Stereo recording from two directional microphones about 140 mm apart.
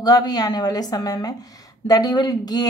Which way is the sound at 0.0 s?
25° left (ahead or behind).